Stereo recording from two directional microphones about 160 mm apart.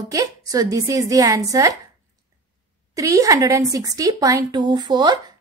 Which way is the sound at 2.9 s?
20° right (ahead or behind).